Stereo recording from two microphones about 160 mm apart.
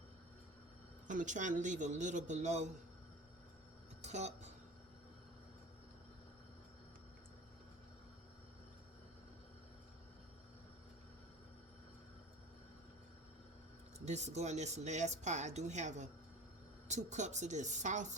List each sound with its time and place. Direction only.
1.0 s speech: 50° right (ahead or behind)
4.0 s speech: 45° right (ahead or behind)
14.0 s speech: 45° right (ahead or behind)